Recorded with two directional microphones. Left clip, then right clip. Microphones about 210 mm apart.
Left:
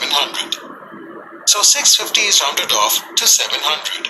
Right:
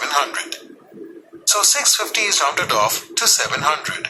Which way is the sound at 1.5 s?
20° right (ahead or behind).